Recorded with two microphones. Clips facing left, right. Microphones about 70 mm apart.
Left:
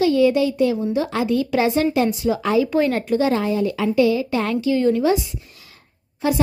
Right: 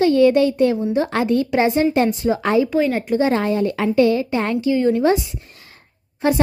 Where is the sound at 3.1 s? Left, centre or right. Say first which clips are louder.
Right 1 dB; right.